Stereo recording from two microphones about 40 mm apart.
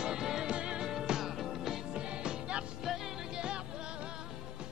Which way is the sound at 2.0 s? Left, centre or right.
Right.